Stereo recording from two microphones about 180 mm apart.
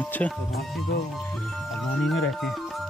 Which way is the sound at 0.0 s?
10° left (ahead or behind).